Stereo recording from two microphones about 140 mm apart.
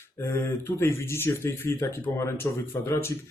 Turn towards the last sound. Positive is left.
turn(degrees=20)  # may be behind; listen again after turning